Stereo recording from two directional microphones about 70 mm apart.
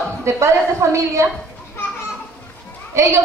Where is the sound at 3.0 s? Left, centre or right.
Right.